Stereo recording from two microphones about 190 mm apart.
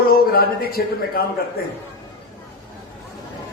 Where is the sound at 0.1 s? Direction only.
50° left (ahead or behind).